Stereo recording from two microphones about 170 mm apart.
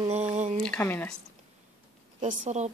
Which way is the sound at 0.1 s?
40° right (ahead or behind).